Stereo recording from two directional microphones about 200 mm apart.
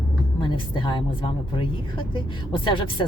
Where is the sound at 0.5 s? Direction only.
25° left (ahead or behind).